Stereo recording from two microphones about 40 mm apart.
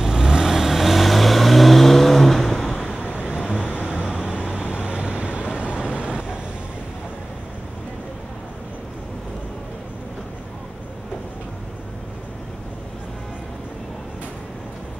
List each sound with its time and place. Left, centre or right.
0.0 s vehicle: centre
2.8 s vehicle: centre
3.5 s vehicle: left
3.9 s vehicle: right